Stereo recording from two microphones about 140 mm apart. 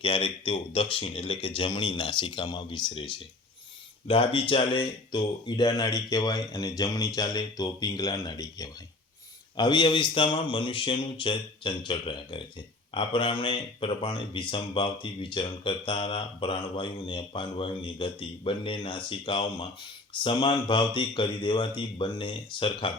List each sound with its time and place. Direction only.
0.0 s speech: 40° left (ahead or behind)